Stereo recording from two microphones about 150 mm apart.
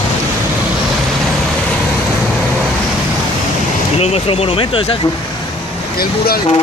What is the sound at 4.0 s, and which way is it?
Speech, 40° left (ahead or behind).